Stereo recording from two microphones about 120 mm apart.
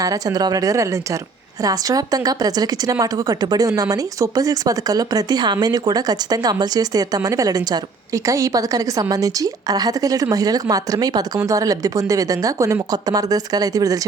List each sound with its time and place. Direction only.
0.0 s a woman's voice: 30° right (ahead or behind)